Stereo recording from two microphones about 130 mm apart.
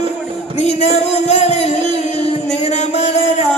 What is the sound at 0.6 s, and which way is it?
Music, 55° left (ahead or behind).